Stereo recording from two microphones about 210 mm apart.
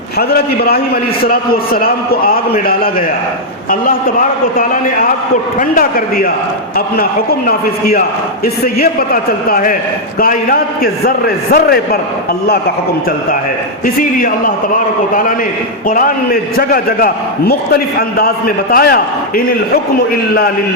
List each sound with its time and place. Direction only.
0.2 s a man's voice: 50° left (ahead or behind)
5.5 s a man's voice: 40° left (ahead or behind)
13.8 s a man's voice: 40° left (ahead or behind)